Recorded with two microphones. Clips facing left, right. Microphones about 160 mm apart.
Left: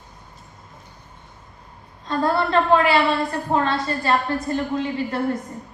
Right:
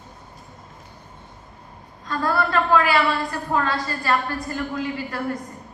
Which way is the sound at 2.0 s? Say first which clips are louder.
Left 2 dB; 25° left (ahead or behind).